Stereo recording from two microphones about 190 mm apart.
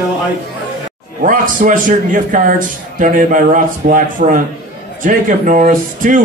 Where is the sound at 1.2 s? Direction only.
45° right (ahead or behind).